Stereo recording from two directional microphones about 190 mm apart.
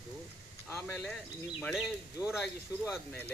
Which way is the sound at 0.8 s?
5° left (ahead or behind).